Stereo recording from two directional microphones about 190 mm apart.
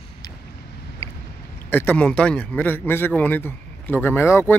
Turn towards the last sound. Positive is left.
turn(degrees=10)  # may be behind; listen again after turning